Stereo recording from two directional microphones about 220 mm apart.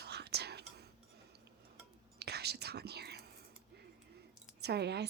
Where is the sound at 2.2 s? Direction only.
45° right (ahead or behind).